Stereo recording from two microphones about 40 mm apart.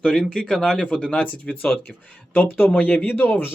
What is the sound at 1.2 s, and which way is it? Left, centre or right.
Speech, left.